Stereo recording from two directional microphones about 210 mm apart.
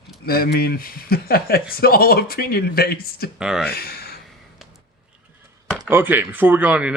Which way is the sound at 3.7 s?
45° left (ahead or behind).